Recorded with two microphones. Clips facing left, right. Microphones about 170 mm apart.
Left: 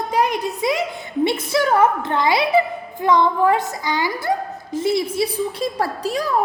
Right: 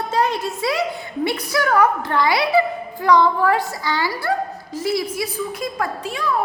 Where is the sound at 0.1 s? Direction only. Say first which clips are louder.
Left 1 dB; 15° left (ahead or behind).